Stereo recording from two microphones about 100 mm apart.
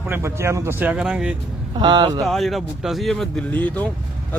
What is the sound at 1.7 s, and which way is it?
Speech, 45° right (ahead or behind).